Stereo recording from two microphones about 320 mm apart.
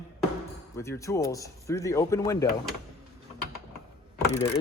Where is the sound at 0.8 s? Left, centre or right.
Centre.